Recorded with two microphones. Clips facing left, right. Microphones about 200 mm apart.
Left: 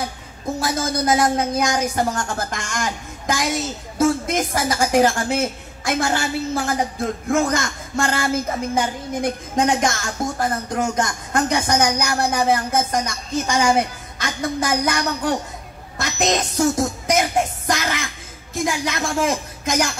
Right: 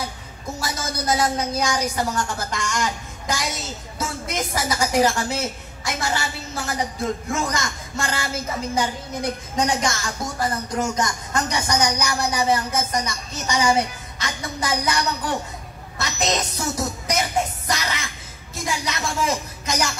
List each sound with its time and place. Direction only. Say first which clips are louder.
0.6 s a woman's voice: left 6 dB; 55° left (ahead or behind)
18.9 s a woman's voice: left 1 dB; 50° left (ahead or behind)